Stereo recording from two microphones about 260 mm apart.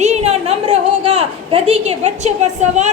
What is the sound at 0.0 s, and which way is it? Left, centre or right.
A woman's voice, right.